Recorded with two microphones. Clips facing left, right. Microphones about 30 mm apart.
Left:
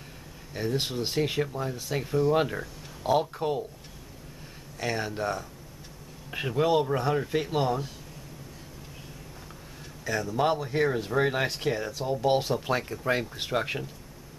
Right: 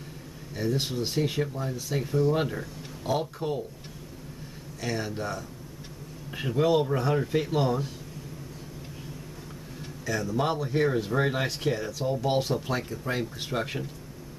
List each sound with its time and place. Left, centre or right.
0.6 s speech: centre
4.7 s speech: centre
6.3 s speech: centre
10.0 s speech: centre